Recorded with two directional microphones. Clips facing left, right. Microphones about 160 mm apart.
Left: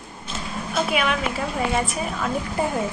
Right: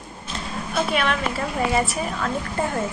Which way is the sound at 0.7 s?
5° left (ahead or behind).